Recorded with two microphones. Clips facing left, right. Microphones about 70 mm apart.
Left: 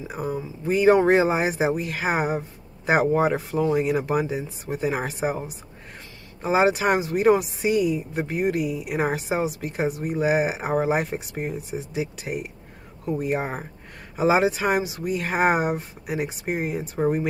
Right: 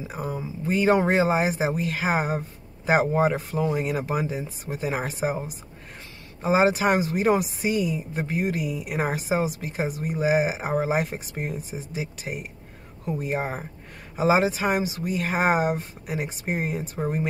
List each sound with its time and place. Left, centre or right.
0.1 s speech: centre
12.3 s speech: centre
13.0 s speech: centre